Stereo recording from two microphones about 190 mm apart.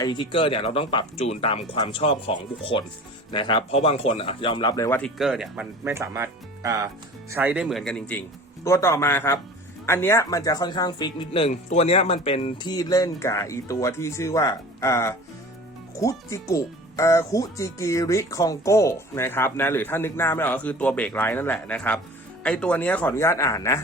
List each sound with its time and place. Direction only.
0.0 s speech: 25° left (ahead or behind)
3.3 s speech: 25° left (ahead or behind)
4.9 s speech: centre (ahead or behind)